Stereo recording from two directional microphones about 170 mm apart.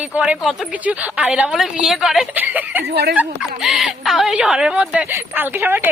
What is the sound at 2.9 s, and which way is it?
Speech, 70° right (ahead or behind).